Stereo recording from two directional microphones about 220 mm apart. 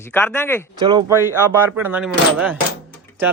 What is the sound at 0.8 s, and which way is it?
Speech, 20° right (ahead or behind).